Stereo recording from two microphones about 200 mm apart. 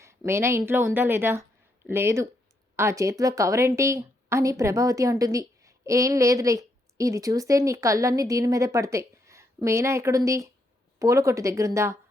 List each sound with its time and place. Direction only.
0.0 s a woman's voice: 15° right (ahead or behind)